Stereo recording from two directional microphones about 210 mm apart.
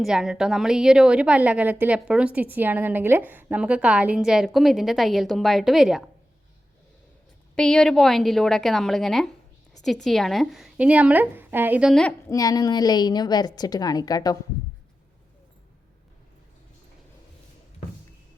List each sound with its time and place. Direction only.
0.0 s a woman's voice: centre (ahead or behind)
7.5 s a woman's voice: 5° left (ahead or behind)
12.3 s a woman's voice: 15° left (ahead or behind)